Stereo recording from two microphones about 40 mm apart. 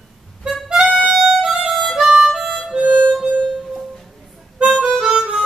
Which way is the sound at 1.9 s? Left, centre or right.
Centre.